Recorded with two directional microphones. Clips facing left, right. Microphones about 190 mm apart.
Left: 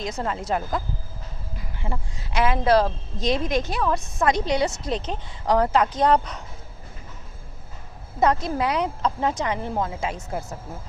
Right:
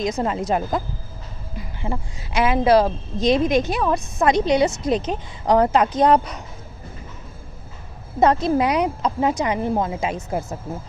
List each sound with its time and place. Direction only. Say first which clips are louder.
0.0 s a woman's voice: right 6 dB; 15° right (ahead or behind)
1.5 s a sound: right 5 dB; 20° right (ahead or behind)
2.3 s a woman's voice: right 3 dB; 10° right (ahead or behind)
8.2 s a woman's voice: right 4 dB; 25° right (ahead or behind)